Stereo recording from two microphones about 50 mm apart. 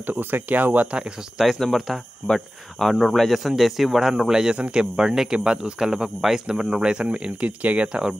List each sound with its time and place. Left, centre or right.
0.0 s speech: right
1.4 s speech: centre; by 8.0 s right